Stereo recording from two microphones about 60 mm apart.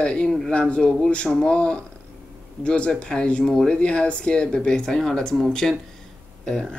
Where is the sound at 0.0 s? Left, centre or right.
Centre.